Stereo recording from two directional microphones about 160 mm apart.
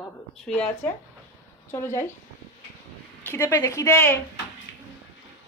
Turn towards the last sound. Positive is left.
turn(degrees=15)  # may be behind; listen again after turning